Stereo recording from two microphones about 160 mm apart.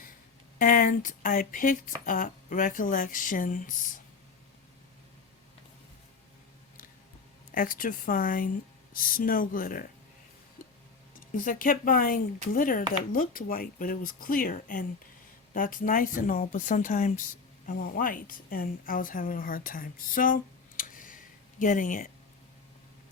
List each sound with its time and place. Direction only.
0.6 s speech: 55° left (ahead or behind)
7.5 s speech: 60° left (ahead or behind)
11.3 s speech: 60° left (ahead or behind)
17.7 s a woman's voice: 65° left (ahead or behind)